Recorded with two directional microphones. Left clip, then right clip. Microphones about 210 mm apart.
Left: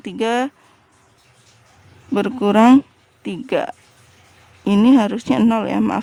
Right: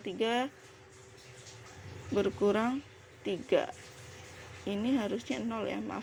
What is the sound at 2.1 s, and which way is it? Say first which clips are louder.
Speech: left 11 dB; 35° left (ahead or behind).